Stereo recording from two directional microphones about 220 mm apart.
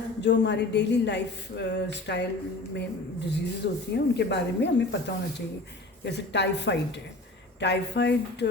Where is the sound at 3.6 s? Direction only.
50° left (ahead or behind).